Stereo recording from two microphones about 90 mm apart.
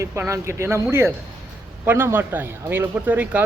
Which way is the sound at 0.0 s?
35° right (ahead or behind).